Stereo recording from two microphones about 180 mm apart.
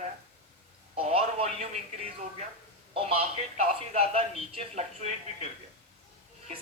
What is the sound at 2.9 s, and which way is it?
Speech, 35° right (ahead or behind).